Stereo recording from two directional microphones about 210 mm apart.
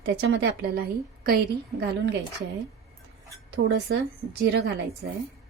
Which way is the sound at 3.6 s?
55° right (ahead or behind).